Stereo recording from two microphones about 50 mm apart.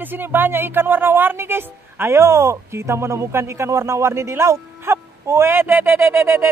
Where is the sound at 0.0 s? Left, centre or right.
Right.